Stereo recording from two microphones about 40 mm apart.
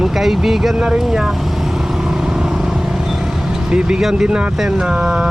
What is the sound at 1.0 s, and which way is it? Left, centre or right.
Speech, centre.